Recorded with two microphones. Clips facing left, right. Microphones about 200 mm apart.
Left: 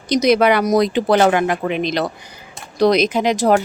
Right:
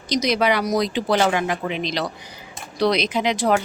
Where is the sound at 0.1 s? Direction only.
55° left (ahead or behind).